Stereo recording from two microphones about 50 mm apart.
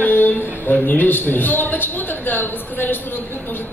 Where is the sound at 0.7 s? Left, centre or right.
Left.